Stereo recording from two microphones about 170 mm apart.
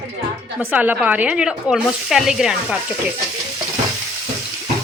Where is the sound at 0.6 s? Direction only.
10° right (ahead or behind).